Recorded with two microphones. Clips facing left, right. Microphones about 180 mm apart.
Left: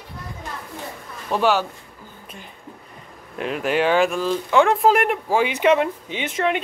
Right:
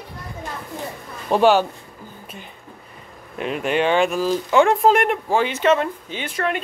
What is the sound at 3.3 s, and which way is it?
Speech, centre (ahead or behind).